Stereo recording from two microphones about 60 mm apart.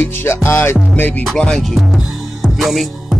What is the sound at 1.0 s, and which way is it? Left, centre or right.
Music, left.